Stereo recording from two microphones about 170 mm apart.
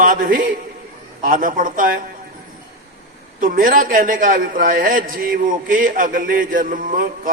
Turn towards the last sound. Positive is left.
turn(degrees=-50)  # may be behind; listen again after turning